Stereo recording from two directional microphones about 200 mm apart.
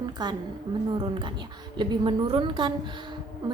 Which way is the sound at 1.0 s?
25° right (ahead or behind).